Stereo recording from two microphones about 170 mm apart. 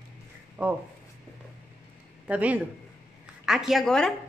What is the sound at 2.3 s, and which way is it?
A woman's voice, 10° right (ahead or behind).